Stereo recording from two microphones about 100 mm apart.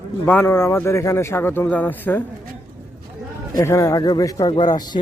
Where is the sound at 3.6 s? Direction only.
30° left (ahead or behind).